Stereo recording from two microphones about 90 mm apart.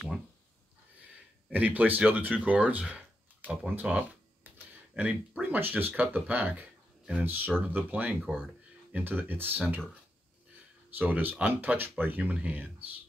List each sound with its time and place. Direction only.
1.5 s speech: 20° right (ahead or behind)
3.4 s a sound: 15° right (ahead or behind)
5.4 s speech: 20° right (ahead or behind)
11.0 s speech: 20° right (ahead or behind)